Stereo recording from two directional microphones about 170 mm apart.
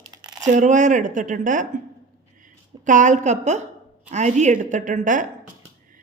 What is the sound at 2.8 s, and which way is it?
A woman's voice, 45° right (ahead or behind).